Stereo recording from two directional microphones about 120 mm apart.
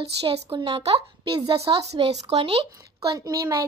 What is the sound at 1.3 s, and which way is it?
Speech, 35° right (ahead or behind).